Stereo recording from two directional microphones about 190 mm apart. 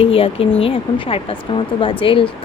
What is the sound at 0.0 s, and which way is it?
Speech, 30° left (ahead or behind).